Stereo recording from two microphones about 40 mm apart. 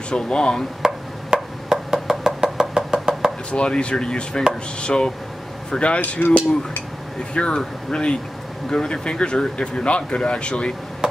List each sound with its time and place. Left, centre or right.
0.1 s a man's voice: left
0.8 s wood block: centre
2.7 s knock: centre
3.5 s a man's voice: left
5.9 s cutlery: left
7.3 s a man's voice: left